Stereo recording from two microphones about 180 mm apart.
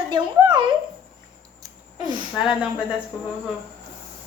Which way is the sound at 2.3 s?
5° right (ahead or behind).